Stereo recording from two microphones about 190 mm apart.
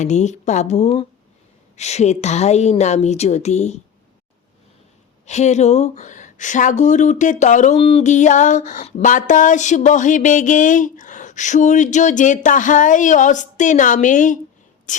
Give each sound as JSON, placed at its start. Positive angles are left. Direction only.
{"t": 0.0, "sound": "speech", "side_deg": 40}
{"t": 5.2, "sound": "speech", "side_deg": 35}
{"t": 14.9, "sound": "a sound", "side_deg": 40}